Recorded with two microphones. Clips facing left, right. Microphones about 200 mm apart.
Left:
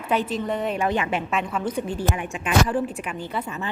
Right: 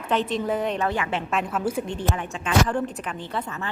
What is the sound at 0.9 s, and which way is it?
Speech, 15° left (ahead or behind).